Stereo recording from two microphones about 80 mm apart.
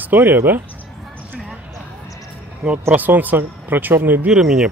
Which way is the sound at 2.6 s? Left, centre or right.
Centre.